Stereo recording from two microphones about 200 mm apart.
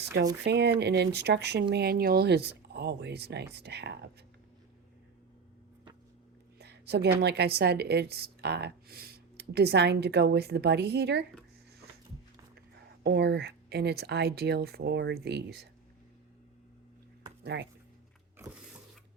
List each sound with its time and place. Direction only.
0.4 s speech: 55° right (ahead or behind)
6.6 s a woman's voice: 55° right (ahead or behind)
13.0 s speech: 55° right (ahead or behind)
17.4 s speech: 60° right (ahead or behind)